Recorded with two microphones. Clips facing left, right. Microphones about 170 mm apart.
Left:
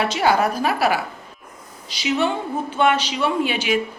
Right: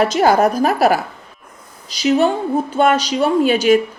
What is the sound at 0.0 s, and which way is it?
A woman's voice, 45° right (ahead or behind).